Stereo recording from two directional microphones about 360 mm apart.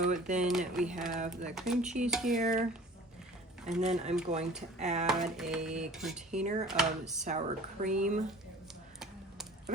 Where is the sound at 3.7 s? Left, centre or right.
Centre.